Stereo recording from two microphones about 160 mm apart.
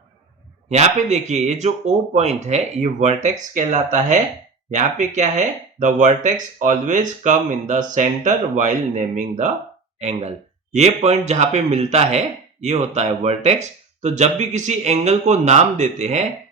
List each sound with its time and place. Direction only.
0.7 s speech: 45° right (ahead or behind)